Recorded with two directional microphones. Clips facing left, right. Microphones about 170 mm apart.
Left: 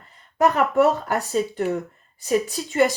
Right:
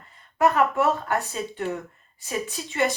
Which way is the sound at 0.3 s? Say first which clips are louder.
Left 3 dB; 40° left (ahead or behind).